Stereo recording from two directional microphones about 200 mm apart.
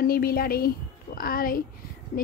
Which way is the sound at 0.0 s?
50° left (ahead or behind).